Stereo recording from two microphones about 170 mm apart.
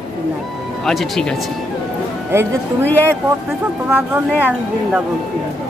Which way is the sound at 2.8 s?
10° left (ahead or behind).